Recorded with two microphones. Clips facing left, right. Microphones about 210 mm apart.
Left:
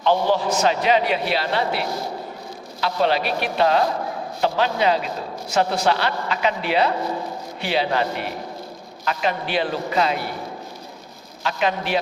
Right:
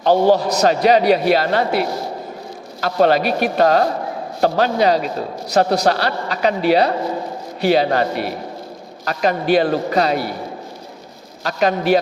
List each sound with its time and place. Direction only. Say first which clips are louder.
0.0 s a man's voice: right 6 dB; 40° right (ahead or behind)
2.8 s a man's voice: right 6 dB; 45° right (ahead or behind)
11.4 s a man's voice: right 6 dB; 40° right (ahead or behind)